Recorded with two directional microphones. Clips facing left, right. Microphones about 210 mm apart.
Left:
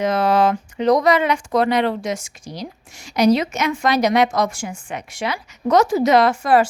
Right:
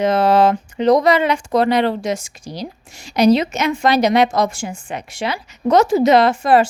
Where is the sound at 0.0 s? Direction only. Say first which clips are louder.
Right 3 dB; 25° right (ahead or behind).